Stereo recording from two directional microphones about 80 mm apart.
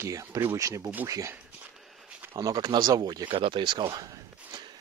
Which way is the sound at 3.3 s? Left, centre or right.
Right.